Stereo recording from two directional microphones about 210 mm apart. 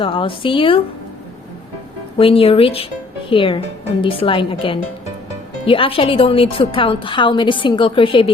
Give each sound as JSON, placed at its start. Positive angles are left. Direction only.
{"t": 0.0, "sound": "a woman's voice", "side_deg": 25}
{"t": 2.1, "sound": "a woman's voice", "side_deg": 25}